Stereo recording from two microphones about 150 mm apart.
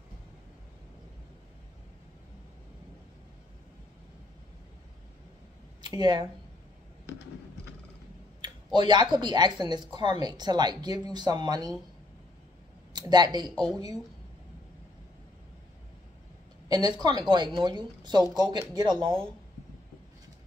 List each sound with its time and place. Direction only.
5.8 s speech: 30° right (ahead or behind)
8.7 s speech: 30° right (ahead or behind)
12.9 s speech: 30° right (ahead or behind)
16.6 s speech: 25° right (ahead or behind)